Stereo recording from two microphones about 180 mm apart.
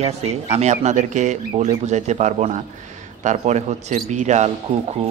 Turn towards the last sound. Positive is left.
turn(degrees=-35)  # may be behind; listen again after turning